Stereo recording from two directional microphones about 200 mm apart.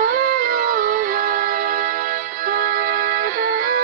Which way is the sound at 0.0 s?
40° right (ahead or behind).